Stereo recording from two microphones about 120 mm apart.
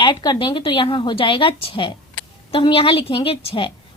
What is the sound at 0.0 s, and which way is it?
Speech, 40° left (ahead or behind).